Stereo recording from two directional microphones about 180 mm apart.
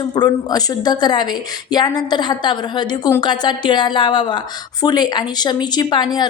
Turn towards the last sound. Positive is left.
turn(degrees=25)  # may be behind; listen again after turning